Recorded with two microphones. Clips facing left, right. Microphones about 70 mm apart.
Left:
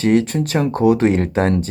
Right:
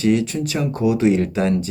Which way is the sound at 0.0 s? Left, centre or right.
Left.